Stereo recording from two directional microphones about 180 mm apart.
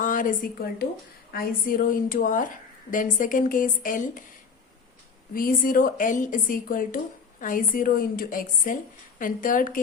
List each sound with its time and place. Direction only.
0.0 s a woman's voice: 45° left (ahead or behind)
5.3 s a woman's voice: 50° left (ahead or behind)